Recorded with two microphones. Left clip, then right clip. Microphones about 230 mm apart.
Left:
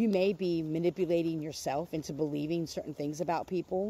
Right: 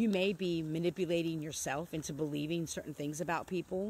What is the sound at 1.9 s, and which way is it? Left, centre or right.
Speech, centre.